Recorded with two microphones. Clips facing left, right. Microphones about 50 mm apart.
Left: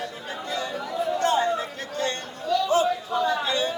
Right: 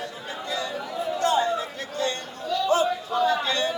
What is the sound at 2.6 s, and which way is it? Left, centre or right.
Chatter, right.